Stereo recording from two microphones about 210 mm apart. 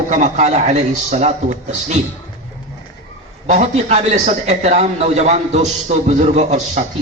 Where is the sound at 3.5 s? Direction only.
35° right (ahead or behind).